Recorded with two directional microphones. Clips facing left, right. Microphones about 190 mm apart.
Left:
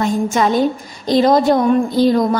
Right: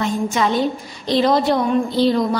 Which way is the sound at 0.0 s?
45° left (ahead or behind).